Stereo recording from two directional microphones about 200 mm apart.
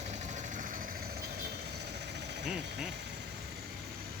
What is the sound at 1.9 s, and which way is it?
Vehicle, 60° right (ahead or behind).